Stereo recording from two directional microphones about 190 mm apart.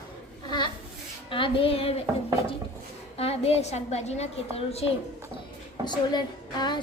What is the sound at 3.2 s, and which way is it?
A woman's voice, 30° left (ahead or behind).